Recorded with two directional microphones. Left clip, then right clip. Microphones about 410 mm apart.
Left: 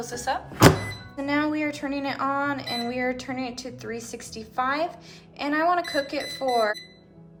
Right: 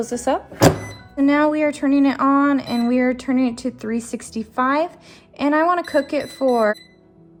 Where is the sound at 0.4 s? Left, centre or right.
Centre.